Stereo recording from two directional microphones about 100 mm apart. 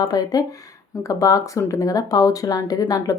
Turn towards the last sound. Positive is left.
turn(degrees=40)  # may be behind; listen again after turning